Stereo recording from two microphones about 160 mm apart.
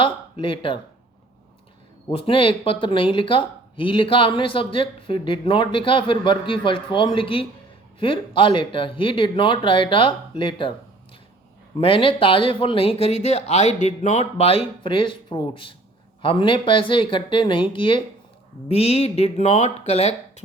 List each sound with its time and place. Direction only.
0.0 s speech: 35° left (ahead or behind)
2.0 s speech: 35° left (ahead or behind)
11.8 s speech: 35° left (ahead or behind)